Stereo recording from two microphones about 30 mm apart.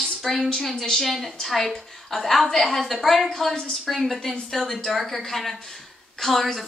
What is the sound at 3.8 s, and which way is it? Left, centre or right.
A woman's voice, centre.